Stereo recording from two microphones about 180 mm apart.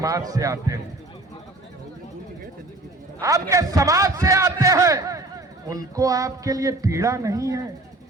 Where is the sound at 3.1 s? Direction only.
20° right (ahead or behind).